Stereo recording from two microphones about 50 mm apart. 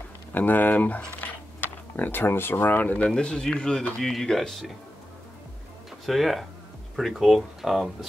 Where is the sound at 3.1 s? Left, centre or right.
Centre.